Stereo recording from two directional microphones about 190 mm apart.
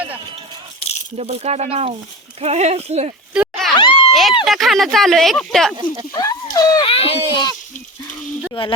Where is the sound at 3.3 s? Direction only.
Centre (ahead or behind).